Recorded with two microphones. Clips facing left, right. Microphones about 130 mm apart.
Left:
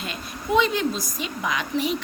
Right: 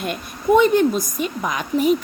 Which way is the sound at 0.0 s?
55° right (ahead or behind).